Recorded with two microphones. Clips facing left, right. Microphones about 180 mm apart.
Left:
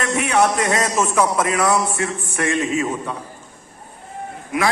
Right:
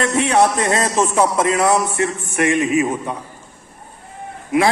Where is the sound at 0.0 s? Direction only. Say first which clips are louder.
Right 3 dB; 30° right (ahead or behind).